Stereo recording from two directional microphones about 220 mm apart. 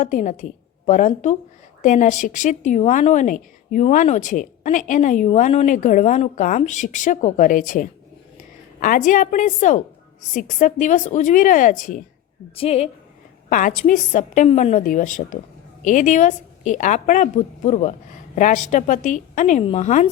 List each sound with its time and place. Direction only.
0.0 s a woman's voice: 35° left (ahead or behind)